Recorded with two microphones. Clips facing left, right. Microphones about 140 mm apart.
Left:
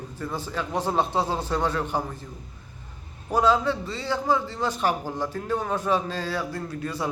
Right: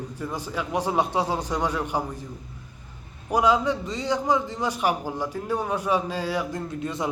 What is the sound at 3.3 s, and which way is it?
A man's voice, 15° right (ahead or behind).